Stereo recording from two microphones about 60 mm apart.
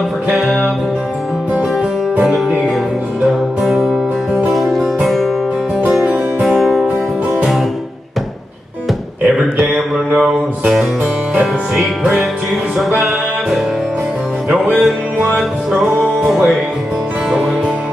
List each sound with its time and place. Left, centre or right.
0.3 s music: centre
1.5 s music: centre
3.3 s music: centre
6.4 s music: centre
9.4 s music: centre
12.7 s music: centre
14.8 s music: centre